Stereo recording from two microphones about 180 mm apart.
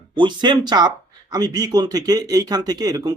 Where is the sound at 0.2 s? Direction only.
25° right (ahead or behind).